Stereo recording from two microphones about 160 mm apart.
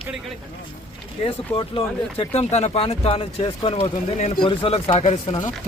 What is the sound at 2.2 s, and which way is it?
Speech, 40° left (ahead or behind).